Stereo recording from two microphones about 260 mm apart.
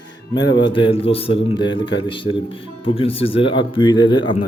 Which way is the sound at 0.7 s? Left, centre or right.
Centre.